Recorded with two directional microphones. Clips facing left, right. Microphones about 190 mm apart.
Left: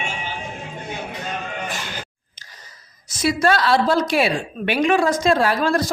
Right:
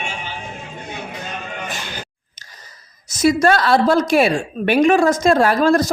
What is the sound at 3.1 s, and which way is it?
A woman's voice, 45° right (ahead or behind).